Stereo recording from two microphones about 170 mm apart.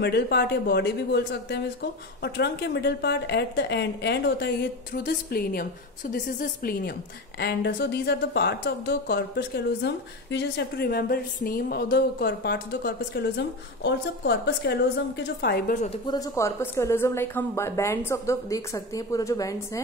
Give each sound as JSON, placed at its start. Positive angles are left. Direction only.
{"t": 0.0, "sound": "speech", "side_deg": 75}
{"t": 7.3, "sound": "speech", "side_deg": 75}
{"t": 15.7, "sound": "speech", "side_deg": 45}
{"t": 16.1, "sound": "speech", "side_deg": 20}